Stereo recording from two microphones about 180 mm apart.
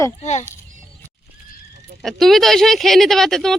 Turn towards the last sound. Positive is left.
turn(degrees=0)  # may be behind; listen again after turning